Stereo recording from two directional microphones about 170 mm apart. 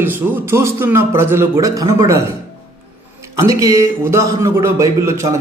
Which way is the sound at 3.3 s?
20° right (ahead or behind).